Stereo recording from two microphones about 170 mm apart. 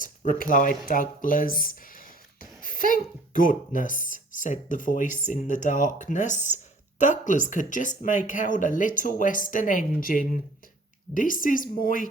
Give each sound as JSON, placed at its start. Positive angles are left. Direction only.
{"t": 0.0, "sound": "speech", "side_deg": 50}